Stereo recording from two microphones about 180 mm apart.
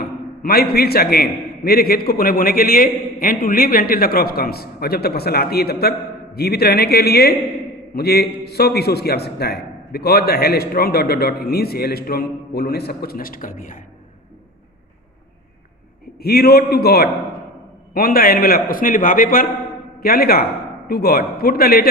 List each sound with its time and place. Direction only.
0.4 s a man's voice: 60° left (ahead or behind)
16.1 s a man's voice: 60° left (ahead or behind)